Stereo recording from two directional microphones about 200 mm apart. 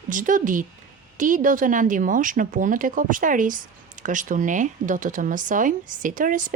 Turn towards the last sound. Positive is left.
turn(degrees=-40)  # may be behind; listen again after turning